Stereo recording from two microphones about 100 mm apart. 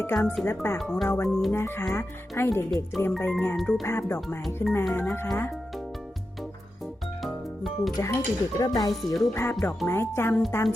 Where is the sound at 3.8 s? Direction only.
25° left (ahead or behind).